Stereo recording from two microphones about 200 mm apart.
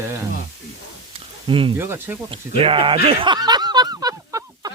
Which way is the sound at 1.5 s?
25° right (ahead or behind).